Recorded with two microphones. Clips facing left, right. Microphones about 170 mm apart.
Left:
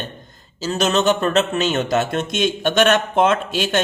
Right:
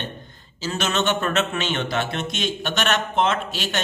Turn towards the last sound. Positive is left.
turn(degrees=50)  # may be behind; listen again after turning